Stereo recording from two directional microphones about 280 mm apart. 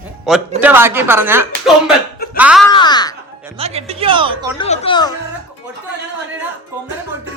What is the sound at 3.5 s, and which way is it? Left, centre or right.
A woman's voice, right.